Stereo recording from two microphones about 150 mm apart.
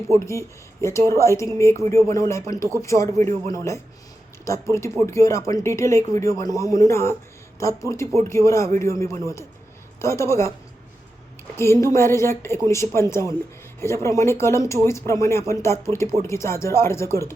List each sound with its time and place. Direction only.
0.1 s speech: 20° left (ahead or behind)
11.5 s speech: 20° left (ahead or behind)